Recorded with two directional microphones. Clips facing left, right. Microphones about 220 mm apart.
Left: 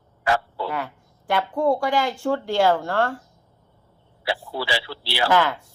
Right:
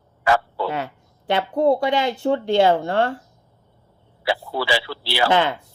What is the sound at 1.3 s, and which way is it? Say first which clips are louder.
Speech: right 3 dB; 25° right (ahead or behind).